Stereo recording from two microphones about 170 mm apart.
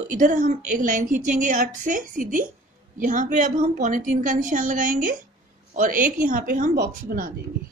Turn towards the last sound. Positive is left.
turn(degrees=-60)  # may be behind; listen again after turning